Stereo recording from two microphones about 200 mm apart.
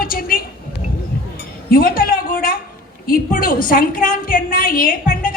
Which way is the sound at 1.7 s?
45° left (ahead or behind).